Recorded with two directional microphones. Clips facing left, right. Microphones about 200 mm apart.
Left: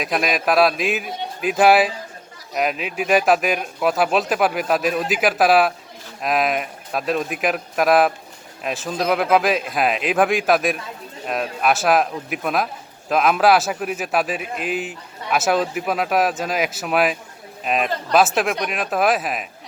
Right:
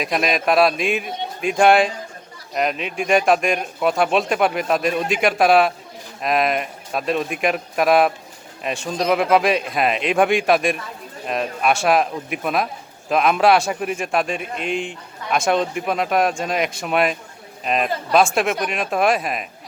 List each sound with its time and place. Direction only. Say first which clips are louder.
0.0 s a man's voice: right 1 dB; centre (ahead or behind)